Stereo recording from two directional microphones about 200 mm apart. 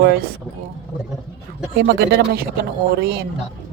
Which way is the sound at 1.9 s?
55° right (ahead or behind).